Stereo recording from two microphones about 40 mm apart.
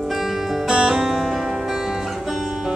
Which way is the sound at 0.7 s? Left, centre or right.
Centre.